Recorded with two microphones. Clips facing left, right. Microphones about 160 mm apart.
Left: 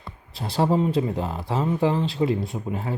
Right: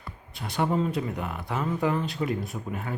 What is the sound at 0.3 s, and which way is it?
Speech, 30° left (ahead or behind).